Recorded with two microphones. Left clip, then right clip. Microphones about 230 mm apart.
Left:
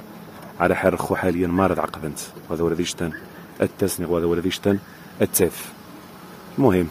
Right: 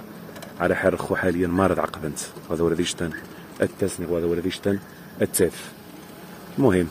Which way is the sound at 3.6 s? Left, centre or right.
Centre.